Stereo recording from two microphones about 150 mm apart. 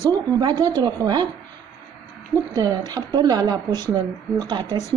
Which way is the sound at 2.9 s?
25° right (ahead or behind).